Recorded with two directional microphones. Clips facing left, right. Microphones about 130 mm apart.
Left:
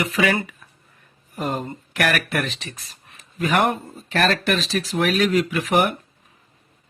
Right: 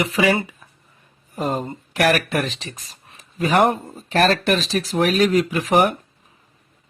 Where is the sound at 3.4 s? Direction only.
35° right (ahead or behind).